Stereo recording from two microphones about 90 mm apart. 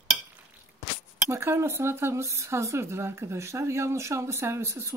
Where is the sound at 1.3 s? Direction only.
30° right (ahead or behind).